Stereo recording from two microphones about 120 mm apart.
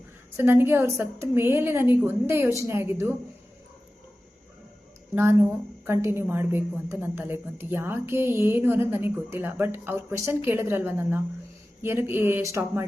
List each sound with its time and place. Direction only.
0.3 s a woman's voice: 20° right (ahead or behind)
5.1 s a woman's voice: 20° right (ahead or behind)